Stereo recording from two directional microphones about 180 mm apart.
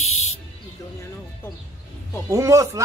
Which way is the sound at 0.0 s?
35° left (ahead or behind).